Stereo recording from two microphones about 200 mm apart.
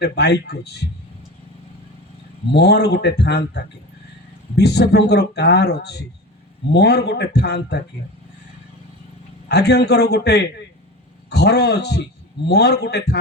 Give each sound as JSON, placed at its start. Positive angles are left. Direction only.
{"t": 0.0, "sound": "speech", "side_deg": 55}
{"t": 2.5, "sound": "speech", "side_deg": 55}
{"t": 9.5, "sound": "speech", "side_deg": 55}